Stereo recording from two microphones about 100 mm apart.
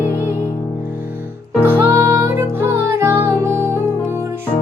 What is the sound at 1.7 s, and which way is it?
Music, 25° right (ahead or behind).